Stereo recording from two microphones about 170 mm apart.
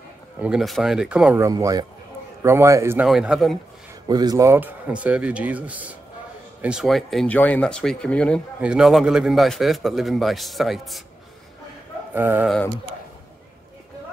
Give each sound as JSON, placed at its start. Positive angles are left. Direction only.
{"t": 0.4, "sound": "a man's voice", "side_deg": -5}
{"t": 1.4, "sound": "speech", "side_deg": -20}
{"t": 3.1, "sound": "a man's voice", "side_deg": 0}
{"t": 4.1, "sound": "a man's voice", "side_deg": -25}
{"t": 8.5, "sound": "a man's voice", "side_deg": -5}
{"t": 12.1, "sound": "speech", "side_deg": -10}